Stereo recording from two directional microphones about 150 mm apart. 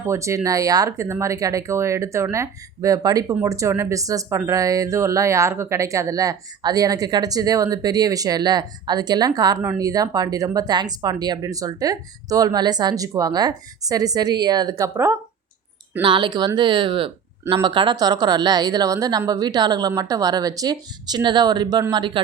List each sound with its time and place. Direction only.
0.0 s speech: 20° right (ahead or behind)
16.0 s speech: 35° right (ahead or behind)